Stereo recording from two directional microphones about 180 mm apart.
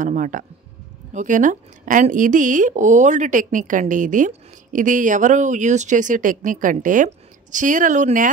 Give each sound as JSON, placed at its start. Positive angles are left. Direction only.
{"t": 0.0, "sound": "speech", "side_deg": -45}